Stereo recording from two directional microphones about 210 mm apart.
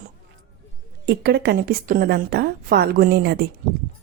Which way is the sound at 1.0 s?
50° right (ahead or behind).